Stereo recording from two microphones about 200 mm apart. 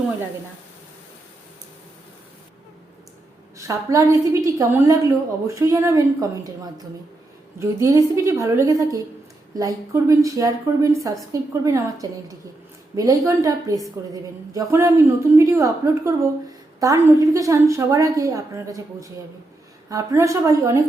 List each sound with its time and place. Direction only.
3.6 s a woman's voice: 15° right (ahead or behind)